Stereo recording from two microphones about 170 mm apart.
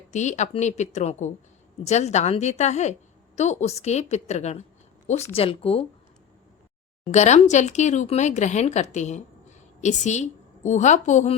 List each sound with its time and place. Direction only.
0.1 s a woman's voice: 45° left (ahead or behind)
7.0 s a woman's voice: 40° left (ahead or behind)